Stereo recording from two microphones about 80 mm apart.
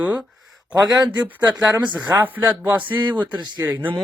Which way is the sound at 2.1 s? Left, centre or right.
Right.